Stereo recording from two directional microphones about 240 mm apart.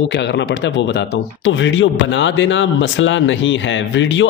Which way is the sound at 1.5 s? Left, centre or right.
Left.